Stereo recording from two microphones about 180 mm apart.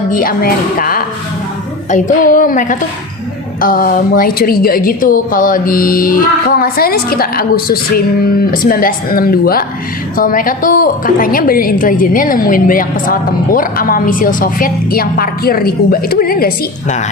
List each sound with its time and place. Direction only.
0.1 s a woman's voice: 50° left (ahead or behind)